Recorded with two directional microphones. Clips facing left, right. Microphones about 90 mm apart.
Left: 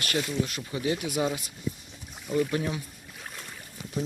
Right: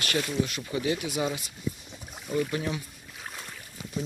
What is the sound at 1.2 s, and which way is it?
Speech, centre (ahead or behind).